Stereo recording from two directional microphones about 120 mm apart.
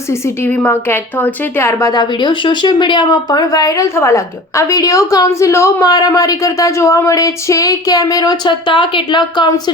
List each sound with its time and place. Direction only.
0.1 s a woman's voice: 20° left (ahead or behind)
1.9 s speech: 40° left (ahead or behind)